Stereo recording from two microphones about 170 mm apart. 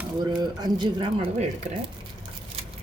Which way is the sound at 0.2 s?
25° right (ahead or behind).